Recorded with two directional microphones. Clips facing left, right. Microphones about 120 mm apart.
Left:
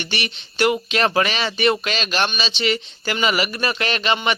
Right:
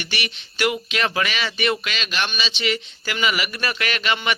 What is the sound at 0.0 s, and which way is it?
Speech, 30° left (ahead or behind).